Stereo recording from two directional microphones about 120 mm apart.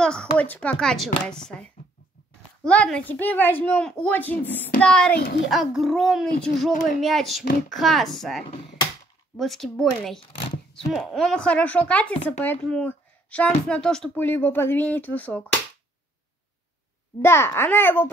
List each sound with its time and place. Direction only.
0.0 s a woman's voice: 5° left (ahead or behind)
5.5 s a woman's voice: centre (ahead or behind)
10.9 s speech: centre (ahead or behind)
14.1 s speech: 15° left (ahead or behind)
17.2 s a child's voice: 20° left (ahead or behind)